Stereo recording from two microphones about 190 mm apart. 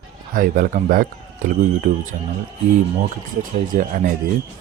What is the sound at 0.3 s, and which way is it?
Speech, 45° right (ahead or behind).